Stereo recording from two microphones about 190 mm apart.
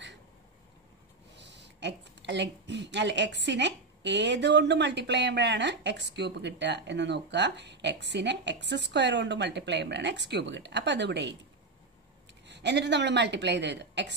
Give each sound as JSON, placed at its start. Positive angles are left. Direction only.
{"t": 1.3, "sound": "a woman's voice", "side_deg": -65}
{"t": 12.4, "sound": "a woman's voice", "side_deg": -65}